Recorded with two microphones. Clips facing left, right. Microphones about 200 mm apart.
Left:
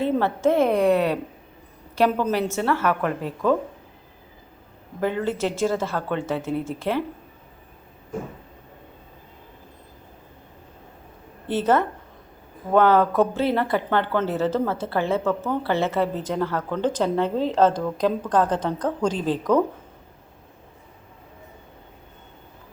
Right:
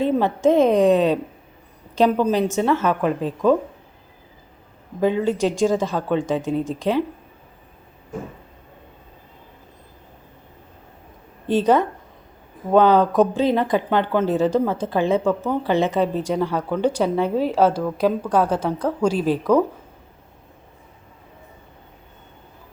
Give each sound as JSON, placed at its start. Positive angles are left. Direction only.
{"t": 0.0, "sound": "speech", "side_deg": -15}
{"t": 4.9, "sound": "speech", "side_deg": -15}
{"t": 11.4, "sound": "speech", "side_deg": -15}